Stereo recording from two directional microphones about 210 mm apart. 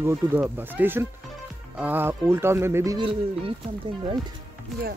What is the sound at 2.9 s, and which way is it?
Speech, 25° right (ahead or behind).